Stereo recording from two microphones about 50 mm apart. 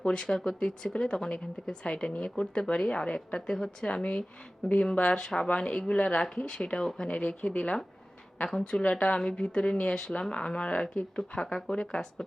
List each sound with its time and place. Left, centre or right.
0.0 s speech: centre
5.1 s speech: centre
5.4 s speech: left
6.2 s speech: centre; by 7.8 s left
8.5 s speech: centre